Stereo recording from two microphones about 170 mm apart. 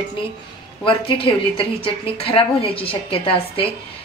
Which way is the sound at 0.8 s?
30° left (ahead or behind).